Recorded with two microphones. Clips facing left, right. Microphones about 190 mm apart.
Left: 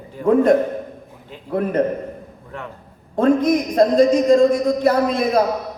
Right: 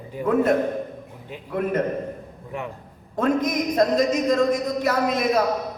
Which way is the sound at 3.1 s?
30° left (ahead or behind).